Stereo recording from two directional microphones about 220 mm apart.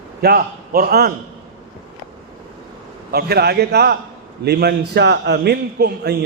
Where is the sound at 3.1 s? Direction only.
45° right (ahead or behind).